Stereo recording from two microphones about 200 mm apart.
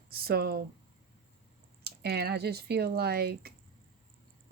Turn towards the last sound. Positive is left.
turn(degrees=-50)  # may be behind; listen again after turning